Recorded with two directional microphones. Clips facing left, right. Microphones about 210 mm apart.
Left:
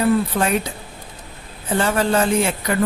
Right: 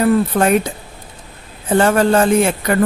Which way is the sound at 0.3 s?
50° right (ahead or behind).